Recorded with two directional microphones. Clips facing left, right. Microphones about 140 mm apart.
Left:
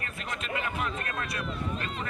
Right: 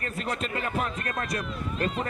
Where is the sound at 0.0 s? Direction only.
40° right (ahead or behind).